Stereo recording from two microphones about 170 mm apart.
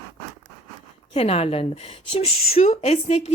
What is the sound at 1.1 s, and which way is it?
A woman's voice, 35° left (ahead or behind).